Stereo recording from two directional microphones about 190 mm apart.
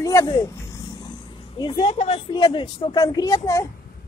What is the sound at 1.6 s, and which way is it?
A woman's voice, 25° left (ahead or behind).